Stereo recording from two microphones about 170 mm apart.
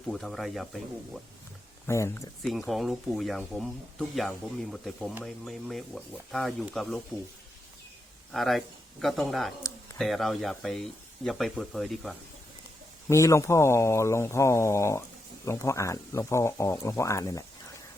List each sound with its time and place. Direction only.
0.1 s speech: centre (ahead or behind)
1.9 s speech: 15° left (ahead or behind)
2.4 s speech: centre (ahead or behind)
8.3 s speech: centre (ahead or behind)
13.1 s speech: 15° left (ahead or behind)